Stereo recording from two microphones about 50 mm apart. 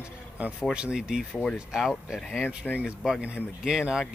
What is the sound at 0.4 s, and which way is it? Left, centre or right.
Speech, right.